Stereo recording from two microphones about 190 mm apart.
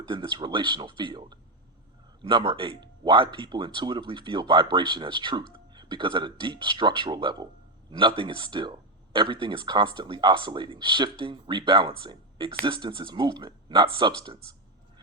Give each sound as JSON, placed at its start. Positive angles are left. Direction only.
{"t": 0.1, "sound": "speech", "side_deg": -25}